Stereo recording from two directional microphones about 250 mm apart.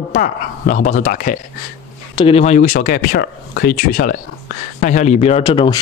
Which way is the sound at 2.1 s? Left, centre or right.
Left.